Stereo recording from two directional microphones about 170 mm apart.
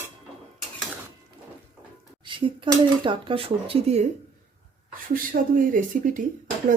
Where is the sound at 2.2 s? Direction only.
30° right (ahead or behind).